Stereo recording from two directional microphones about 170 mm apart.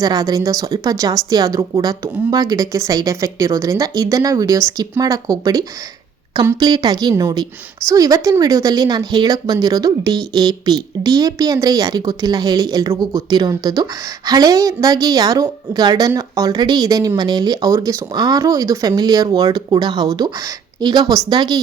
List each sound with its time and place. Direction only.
0.0 s a woman's voice: 20° right (ahead or behind)